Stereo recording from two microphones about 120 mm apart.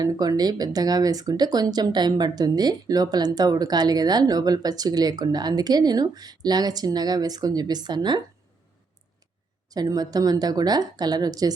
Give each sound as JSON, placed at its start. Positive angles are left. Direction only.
{"t": 0.0, "sound": "speech", "side_deg": -30}
{"t": 9.6, "sound": "speech", "side_deg": -30}